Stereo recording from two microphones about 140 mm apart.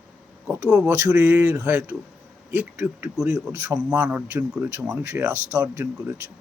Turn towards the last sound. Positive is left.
turn(degrees=-20)  # may be behind; listen again after turning